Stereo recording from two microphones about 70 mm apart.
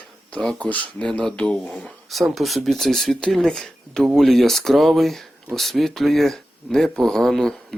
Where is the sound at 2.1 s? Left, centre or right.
Centre.